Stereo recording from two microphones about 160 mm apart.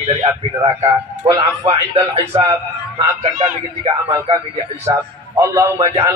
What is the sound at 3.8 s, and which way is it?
A man's voice, 20° right (ahead or behind).